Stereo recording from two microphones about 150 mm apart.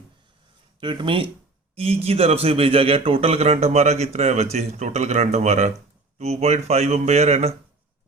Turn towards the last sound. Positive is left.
turn(degrees=-45)  # may be behind; listen again after turning